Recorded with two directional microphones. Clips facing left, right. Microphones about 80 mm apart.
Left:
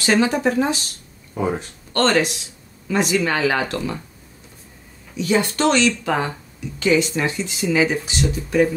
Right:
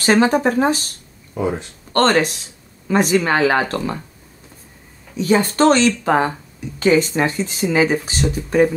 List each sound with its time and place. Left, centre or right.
0.0 s speech: right
2.0 s speech: right
5.1 s speech: right